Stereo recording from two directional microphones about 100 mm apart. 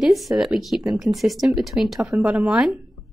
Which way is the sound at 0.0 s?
Centre (ahead or behind).